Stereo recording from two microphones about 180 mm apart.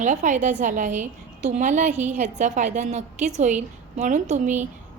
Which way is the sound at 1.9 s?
10° right (ahead or behind).